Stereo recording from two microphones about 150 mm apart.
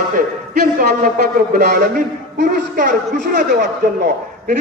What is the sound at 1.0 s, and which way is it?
A man's voice, 85° right.